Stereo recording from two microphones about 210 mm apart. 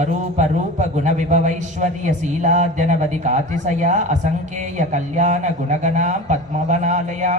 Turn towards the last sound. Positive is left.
turn(degrees=-35)  # may be behind; listen again after turning